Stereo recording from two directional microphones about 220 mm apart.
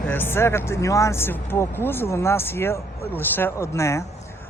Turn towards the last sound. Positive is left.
turn(degrees=10)  # may be behind; listen again after turning